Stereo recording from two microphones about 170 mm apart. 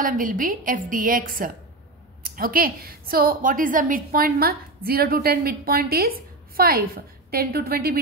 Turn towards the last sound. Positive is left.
turn(degrees=-60)  # may be behind; listen again after turning